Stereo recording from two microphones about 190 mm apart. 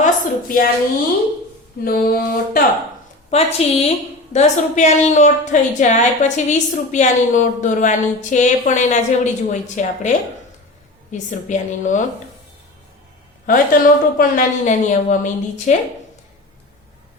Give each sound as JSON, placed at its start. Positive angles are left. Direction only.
{"t": 0.0, "sound": "a sound", "side_deg": 50}
{"t": 1.8, "sound": "a woman's voice", "side_deg": 50}
{"t": 3.2, "sound": "a woman's voice", "side_deg": 35}
{"t": 11.1, "sound": "a woman's voice", "side_deg": 40}
{"t": 13.5, "sound": "a woman's voice", "side_deg": 50}